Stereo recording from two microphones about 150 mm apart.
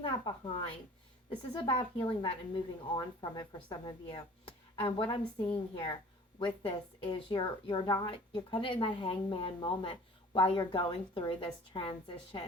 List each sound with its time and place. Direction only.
0.0 s a woman's voice: 35° left (ahead or behind)